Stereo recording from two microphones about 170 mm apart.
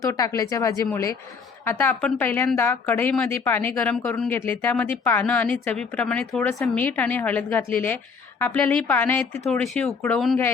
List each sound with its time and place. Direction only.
0.0 s speech: 20° left (ahead or behind); by 9.9 s 5° left (ahead or behind)